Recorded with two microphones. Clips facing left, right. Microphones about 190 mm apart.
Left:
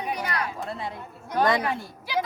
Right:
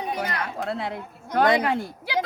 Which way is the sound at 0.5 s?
75° right (ahead or behind).